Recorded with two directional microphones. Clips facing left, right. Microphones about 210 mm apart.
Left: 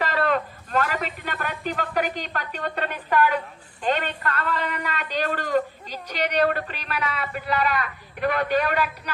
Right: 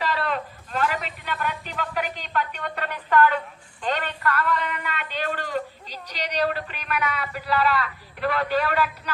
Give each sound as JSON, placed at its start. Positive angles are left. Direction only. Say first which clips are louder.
{"t": 0.0, "sound": "a man's voice", "louder": "left 3 dB", "side_deg": 50}